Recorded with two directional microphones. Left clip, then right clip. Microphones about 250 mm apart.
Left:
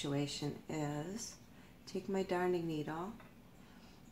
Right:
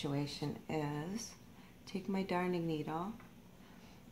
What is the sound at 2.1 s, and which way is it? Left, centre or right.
Speech, centre.